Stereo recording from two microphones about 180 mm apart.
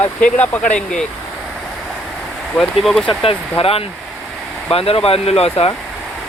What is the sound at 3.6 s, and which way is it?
Speech, 30° left (ahead or behind).